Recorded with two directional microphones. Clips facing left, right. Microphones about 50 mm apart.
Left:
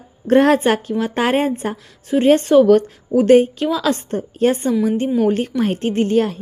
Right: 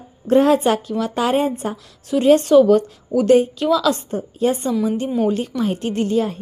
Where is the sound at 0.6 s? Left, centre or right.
Left.